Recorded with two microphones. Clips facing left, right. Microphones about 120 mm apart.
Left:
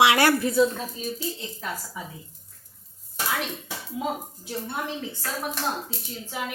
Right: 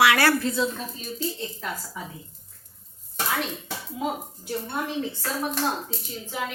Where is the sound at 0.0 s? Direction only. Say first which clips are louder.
Left 1 dB; 20° left (ahead or behind).